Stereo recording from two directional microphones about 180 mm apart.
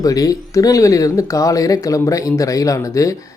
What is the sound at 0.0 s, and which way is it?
Speech, 20° left (ahead or behind).